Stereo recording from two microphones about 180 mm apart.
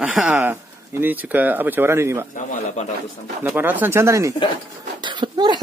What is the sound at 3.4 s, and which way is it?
Speech, 10° right (ahead or behind).